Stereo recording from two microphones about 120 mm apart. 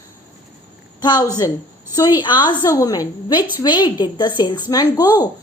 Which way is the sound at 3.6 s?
40° left (ahead or behind).